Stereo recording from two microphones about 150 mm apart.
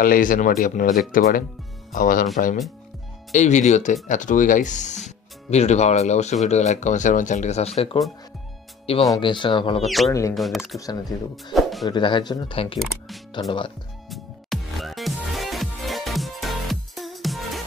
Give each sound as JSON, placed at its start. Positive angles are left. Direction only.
{"t": 0.0, "sound": "speech", "side_deg": 65}
{"t": 3.3, "sound": "speech", "side_deg": 50}
{"t": 9.8, "sound": "speech", "side_deg": 0}
{"t": 10.8, "sound": "speech", "side_deg": 25}
{"t": 11.5, "sound": "music", "side_deg": 0}
{"t": 11.9, "sound": "speech", "side_deg": 30}
{"t": 14.1, "sound": "music", "side_deg": 0}